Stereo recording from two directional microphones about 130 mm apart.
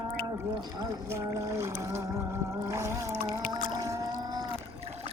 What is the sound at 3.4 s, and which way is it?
Boat, 90° left.